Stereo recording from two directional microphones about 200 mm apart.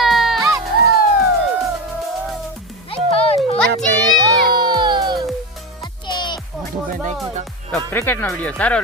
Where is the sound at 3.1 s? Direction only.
30° left (ahead or behind).